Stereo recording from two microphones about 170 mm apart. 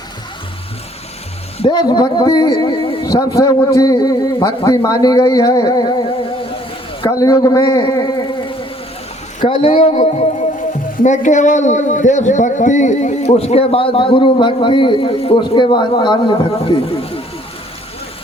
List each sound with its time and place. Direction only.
1.5 s speech: 25° left (ahead or behind)
7.1 s a man's voice: 20° left (ahead or behind)
8.0 s a sound: 30° left (ahead or behind)
9.5 s speech: 30° left (ahead or behind)
9.9 s speech: 45° left (ahead or behind)